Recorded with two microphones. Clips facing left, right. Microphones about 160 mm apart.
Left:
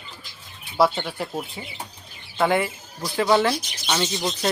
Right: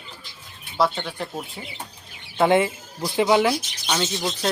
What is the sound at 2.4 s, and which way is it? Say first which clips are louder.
Speech: right 3 dB; 20° right (ahead or behind).